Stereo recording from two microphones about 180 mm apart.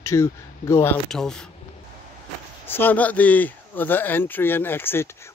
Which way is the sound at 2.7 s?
10° left (ahead or behind).